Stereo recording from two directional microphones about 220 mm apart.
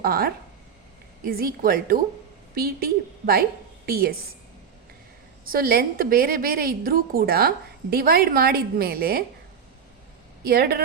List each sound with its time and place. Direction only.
0.0 s a woman's voice: 45° right (ahead or behind)
5.5 s a woman's voice: 45° right (ahead or behind)
10.4 s a woman's voice: 45° right (ahead or behind)